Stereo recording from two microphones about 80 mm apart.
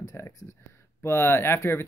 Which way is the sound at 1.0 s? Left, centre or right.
Left.